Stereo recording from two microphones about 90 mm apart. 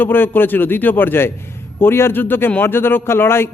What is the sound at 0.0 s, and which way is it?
A man's voice, 25° left (ahead or behind).